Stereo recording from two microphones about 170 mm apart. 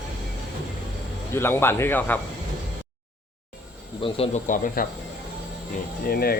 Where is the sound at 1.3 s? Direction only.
15° left (ahead or behind).